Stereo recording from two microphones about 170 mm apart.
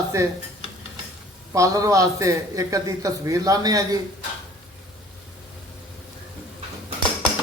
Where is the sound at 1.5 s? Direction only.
20° right (ahead or behind).